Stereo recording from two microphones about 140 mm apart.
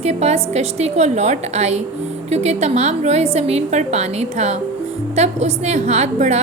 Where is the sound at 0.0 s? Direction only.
50° right (ahead or behind).